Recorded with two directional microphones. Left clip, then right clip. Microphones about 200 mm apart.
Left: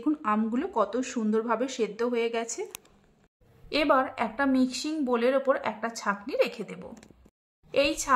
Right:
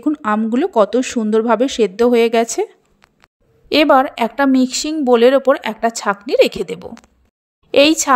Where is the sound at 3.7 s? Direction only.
40° right (ahead or behind).